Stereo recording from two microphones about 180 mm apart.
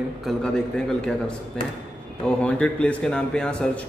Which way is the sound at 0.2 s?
Centre (ahead or behind).